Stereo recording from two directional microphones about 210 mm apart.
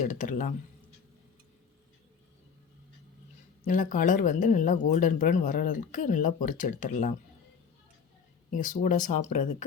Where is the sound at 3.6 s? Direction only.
40° left (ahead or behind).